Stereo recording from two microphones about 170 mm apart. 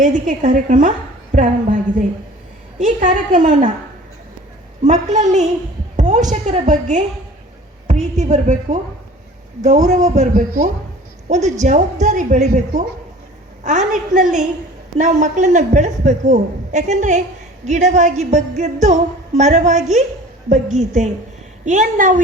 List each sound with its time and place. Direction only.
0.0 s a woman's voice: 45° right (ahead or behind)
4.9 s a man's voice: 45° right (ahead or behind)
6.0 s a sound: 45° right (ahead or behind)
6.3 s a man's voice: 45° right (ahead or behind)